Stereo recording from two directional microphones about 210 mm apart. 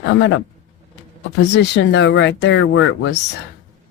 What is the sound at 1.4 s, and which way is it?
Speech, 55° left (ahead or behind).